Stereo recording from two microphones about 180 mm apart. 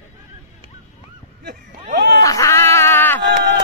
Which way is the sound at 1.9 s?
60° right (ahead or behind).